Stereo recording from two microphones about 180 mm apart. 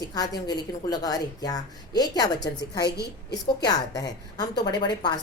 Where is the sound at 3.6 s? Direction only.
20° left (ahead or behind).